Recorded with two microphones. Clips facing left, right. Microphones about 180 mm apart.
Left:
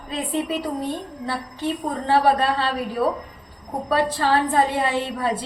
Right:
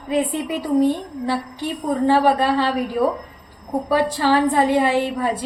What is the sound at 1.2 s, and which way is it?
A woman's voice, 15° right (ahead or behind).